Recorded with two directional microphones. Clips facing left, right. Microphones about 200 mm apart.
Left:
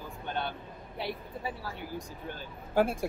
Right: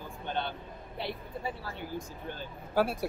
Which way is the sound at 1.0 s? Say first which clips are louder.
Left 1 dB; 10° left (ahead or behind).